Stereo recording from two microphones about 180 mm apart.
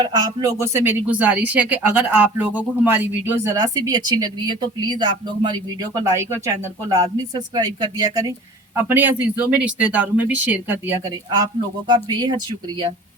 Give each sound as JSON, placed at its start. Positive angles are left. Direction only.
{"t": 0.0, "sound": "speech", "side_deg": -20}
{"t": 8.7, "sound": "a man's voice", "side_deg": -10}